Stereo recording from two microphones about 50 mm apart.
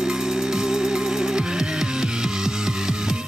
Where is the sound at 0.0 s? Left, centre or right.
Centre.